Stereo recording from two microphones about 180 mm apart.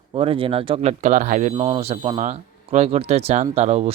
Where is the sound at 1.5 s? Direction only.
30° right (ahead or behind).